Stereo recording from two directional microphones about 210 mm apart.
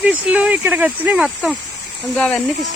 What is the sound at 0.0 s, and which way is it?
Speech, 5° right (ahead or behind).